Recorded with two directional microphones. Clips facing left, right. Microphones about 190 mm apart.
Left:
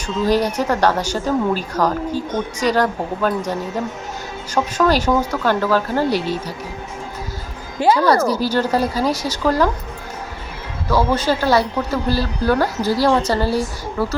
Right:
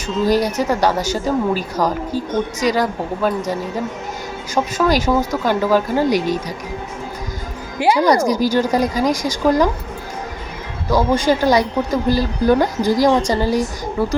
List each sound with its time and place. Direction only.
0.3 s speech: 10° right (ahead or behind)
2.1 s speech: 40° right (ahead or behind)
2.6 s speech: 10° right (ahead or behind)
4.5 s speech: 10° right (ahead or behind)
7.8 s speech: 10° right (ahead or behind)
10.8 s speech: 15° right (ahead or behind)